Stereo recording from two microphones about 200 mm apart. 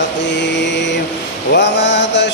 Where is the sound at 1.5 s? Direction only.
60° left (ahead or behind).